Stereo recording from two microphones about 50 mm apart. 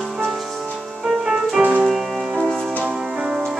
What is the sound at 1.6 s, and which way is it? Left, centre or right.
Music, centre.